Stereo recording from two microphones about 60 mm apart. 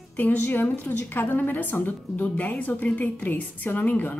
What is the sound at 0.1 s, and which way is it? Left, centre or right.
A woman's voice, left.